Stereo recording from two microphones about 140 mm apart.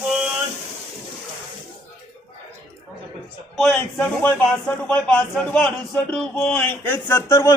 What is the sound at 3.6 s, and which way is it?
Speech, 5° left (ahead or behind).